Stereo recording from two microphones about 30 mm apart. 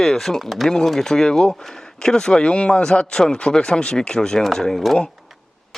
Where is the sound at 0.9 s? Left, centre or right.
Centre.